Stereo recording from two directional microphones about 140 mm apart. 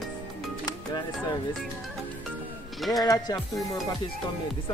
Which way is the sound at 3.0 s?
25° left (ahead or behind).